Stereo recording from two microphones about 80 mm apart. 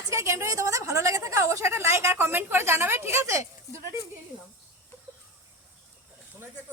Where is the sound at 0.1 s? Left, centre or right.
Right.